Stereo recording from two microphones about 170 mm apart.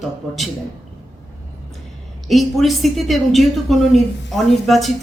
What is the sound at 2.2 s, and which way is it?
A woman's voice, centre (ahead or behind).